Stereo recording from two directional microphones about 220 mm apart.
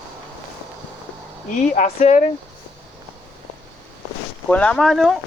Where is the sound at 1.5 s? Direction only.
35° left (ahead or behind).